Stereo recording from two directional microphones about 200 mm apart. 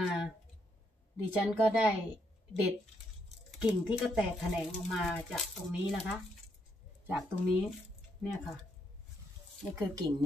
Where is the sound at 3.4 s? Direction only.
5° right (ahead or behind).